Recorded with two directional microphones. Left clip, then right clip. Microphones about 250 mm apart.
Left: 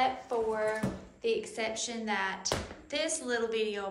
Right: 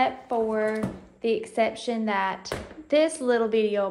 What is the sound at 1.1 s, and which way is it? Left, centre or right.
A woman's voice, right.